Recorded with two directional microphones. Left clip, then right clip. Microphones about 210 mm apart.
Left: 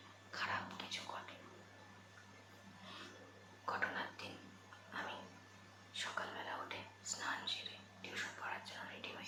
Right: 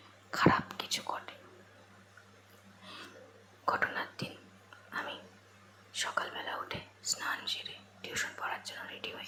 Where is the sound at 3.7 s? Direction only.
25° right (ahead or behind).